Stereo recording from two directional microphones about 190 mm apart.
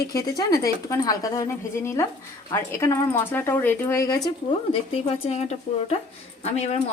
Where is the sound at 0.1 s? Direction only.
15° left (ahead or behind).